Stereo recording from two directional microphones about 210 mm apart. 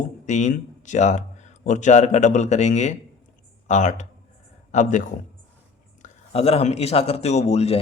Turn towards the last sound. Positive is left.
turn(degrees=30)  # may be behind; listen again after turning